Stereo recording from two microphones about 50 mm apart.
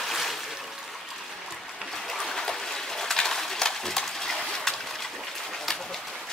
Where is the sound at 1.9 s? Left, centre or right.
Centre.